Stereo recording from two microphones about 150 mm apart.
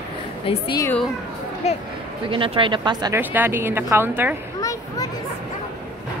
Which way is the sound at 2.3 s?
35° right (ahead or behind).